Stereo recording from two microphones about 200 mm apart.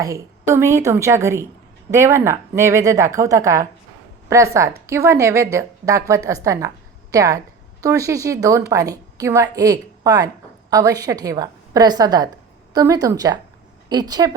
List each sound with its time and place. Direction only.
0.0 s a woman's voice: 15° right (ahead or behind)